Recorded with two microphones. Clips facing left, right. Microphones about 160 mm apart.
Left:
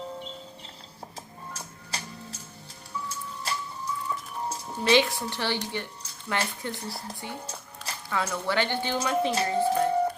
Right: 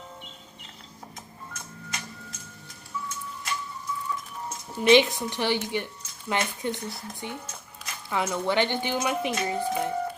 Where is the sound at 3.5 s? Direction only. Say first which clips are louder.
Even; 35° left (ahead or behind).